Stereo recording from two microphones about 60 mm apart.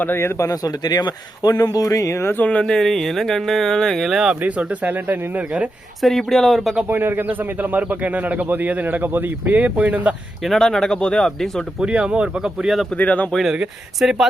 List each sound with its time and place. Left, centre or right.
0.2 s speech: left
0.6 s speech: left
2.4 s speech: left
2.6 s speech: centre
4.0 s speech: centre
4.4 s a man's voice: right
6.0 s speech: centre
6.9 s a man's voice: right
10.4 s speech: centre
11.8 s speech: centre
13.0 s speech: left
13.5 s speech: centre